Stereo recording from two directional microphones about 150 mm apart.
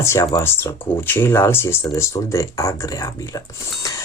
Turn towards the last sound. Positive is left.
turn(degrees=20)  # may be behind; listen again after turning